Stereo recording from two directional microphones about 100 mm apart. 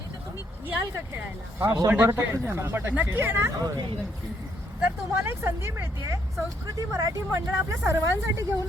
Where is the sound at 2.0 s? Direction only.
25° right (ahead or behind).